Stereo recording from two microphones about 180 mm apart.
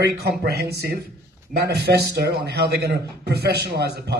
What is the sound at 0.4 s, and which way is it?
A man's voice, 60° right (ahead or behind).